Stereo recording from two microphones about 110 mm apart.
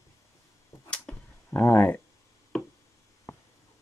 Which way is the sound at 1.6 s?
25° left (ahead or behind).